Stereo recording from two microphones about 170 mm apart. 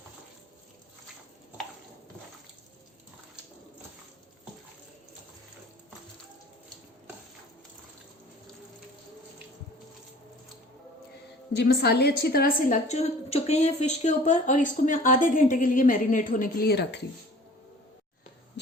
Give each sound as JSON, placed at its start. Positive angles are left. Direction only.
{"t": 11.5, "sound": "a woman's voice", "side_deg": 75}